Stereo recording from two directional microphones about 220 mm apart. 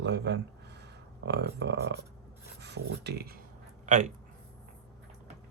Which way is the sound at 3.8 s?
35° right (ahead or behind).